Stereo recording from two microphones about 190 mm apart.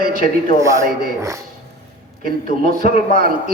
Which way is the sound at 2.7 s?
50° right (ahead or behind).